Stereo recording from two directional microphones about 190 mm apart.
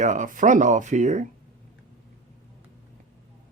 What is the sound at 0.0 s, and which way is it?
Speech, 40° right (ahead or behind).